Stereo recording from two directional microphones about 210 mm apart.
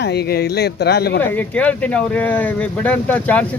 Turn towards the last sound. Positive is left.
turn(degrees=5)  # may be behind; listen again after turning